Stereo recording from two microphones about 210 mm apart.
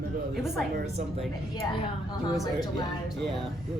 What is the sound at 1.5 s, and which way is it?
Speech, 20° left (ahead or behind).